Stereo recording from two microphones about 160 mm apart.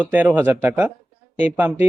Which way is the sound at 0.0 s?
10° right (ahead or behind).